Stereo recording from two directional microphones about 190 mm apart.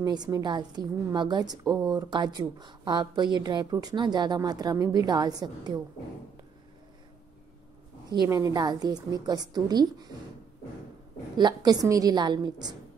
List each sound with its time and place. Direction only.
0.0 s a woman's voice: 20° right (ahead or behind)
8.1 s a woman's voice: 20° right (ahead or behind)
11.3 s a woman's voice: 20° right (ahead or behind)